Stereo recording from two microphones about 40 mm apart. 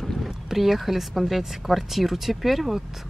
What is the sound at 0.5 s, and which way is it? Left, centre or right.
Speech, centre.